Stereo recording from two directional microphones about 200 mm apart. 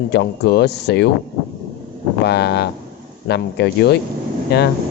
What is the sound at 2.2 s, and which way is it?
Speech, 55° left (ahead or behind).